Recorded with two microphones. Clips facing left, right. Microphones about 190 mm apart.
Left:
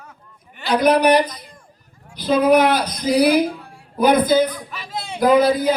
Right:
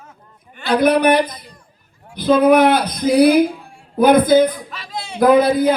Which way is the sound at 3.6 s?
25° right (ahead or behind).